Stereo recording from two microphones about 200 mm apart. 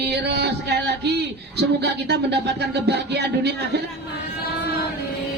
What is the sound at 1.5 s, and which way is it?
Speech, 55° right (ahead or behind).